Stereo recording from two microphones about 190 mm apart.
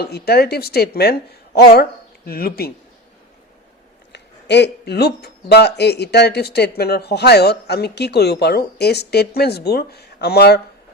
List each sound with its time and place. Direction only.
0.0 s speech: 55° left (ahead or behind)
4.1 s speech: 65° left (ahead or behind)